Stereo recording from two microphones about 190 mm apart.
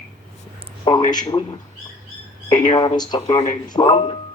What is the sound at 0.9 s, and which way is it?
Speech, 25° left (ahead or behind).